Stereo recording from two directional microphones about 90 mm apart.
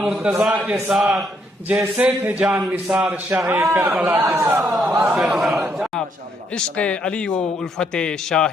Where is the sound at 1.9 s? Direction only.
15° right (ahead or behind).